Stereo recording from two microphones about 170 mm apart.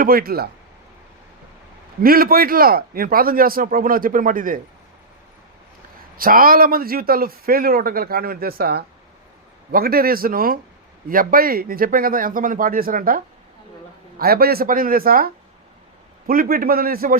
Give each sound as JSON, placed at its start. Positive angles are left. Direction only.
{"t": 0.0, "sound": "a man's voice", "side_deg": -60}
{"t": 2.0, "sound": "a man's voice", "side_deg": -60}
{"t": 6.1, "sound": "a man's voice", "side_deg": -55}